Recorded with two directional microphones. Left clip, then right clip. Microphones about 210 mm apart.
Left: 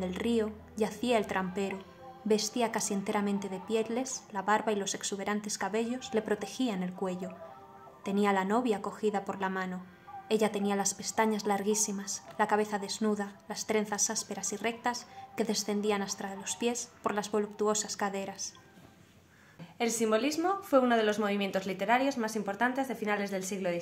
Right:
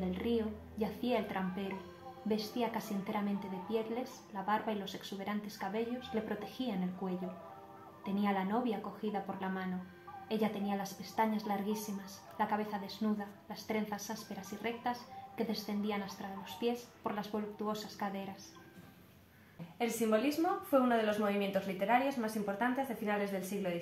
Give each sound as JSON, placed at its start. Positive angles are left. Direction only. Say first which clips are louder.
{"t": 0.1, "sound": "a woman's voice", "louder": "left 4 dB", "side_deg": 60}
{"t": 19.8, "sound": "speech", "louder": "left 4 dB", "side_deg": 45}